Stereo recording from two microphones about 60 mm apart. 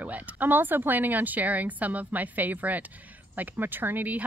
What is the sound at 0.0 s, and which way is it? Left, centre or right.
Speech, right.